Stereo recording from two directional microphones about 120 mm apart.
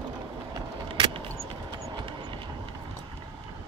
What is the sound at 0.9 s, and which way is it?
Vehicle, 45° right (ahead or behind).